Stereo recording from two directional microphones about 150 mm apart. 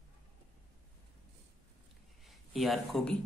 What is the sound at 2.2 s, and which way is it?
Speech, centre (ahead or behind).